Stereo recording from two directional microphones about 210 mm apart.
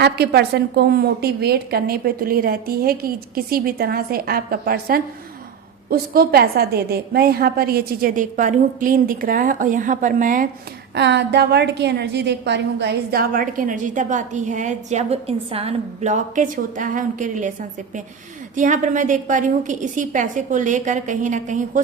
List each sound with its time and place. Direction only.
0.0 s a woman's voice: 50° right (ahead or behind)
10.9 s a woman's voice: 55° right (ahead or behind); by 17.5 s 35° right (ahead or behind)
18.5 s a woman's voice: 35° right (ahead or behind)